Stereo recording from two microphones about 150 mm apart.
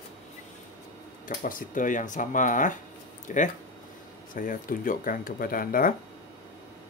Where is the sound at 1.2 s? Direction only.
65° left (ahead or behind).